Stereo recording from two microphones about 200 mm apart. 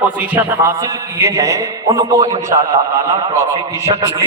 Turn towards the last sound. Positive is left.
turn(degrees=-15)  # may be behind; listen again after turning